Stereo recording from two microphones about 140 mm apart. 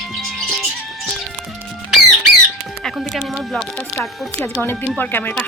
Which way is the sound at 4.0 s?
15° left (ahead or behind).